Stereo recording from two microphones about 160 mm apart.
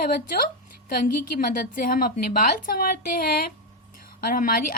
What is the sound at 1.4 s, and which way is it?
A woman's voice, 65° left (ahead or behind).